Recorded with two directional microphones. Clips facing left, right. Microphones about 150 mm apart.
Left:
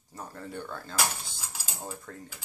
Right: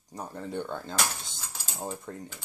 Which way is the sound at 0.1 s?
20° right (ahead or behind).